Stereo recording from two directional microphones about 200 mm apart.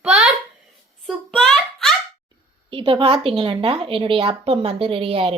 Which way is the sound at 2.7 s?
25° right (ahead or behind).